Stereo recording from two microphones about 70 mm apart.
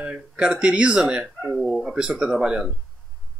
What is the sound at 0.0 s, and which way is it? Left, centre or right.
Speech, centre.